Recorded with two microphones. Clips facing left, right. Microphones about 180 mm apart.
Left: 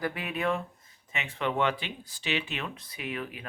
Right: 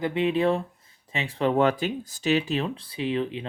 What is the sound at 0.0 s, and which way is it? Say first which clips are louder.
Speech: right 8 dB; 25° right (ahead or behind).